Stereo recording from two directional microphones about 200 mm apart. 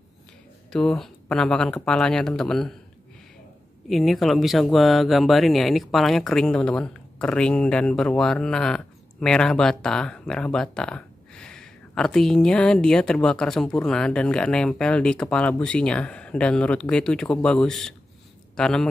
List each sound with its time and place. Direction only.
0.7 s speech: 5° left (ahead or behind)
3.9 s speech: centre (ahead or behind)